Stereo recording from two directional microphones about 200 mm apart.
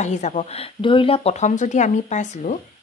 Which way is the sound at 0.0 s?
35° left (ahead or behind).